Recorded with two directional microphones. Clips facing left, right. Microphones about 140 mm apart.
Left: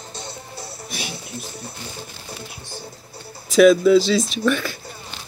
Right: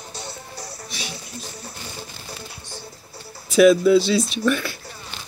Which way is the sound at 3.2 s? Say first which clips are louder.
Left 1 dB; 5° right (ahead or behind).